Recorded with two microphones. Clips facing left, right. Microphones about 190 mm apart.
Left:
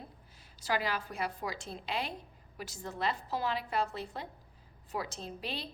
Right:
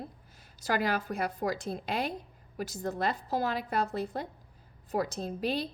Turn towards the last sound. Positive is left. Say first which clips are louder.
# right 9 dB
turn(degrees=-45)  # may be behind; listen again after turning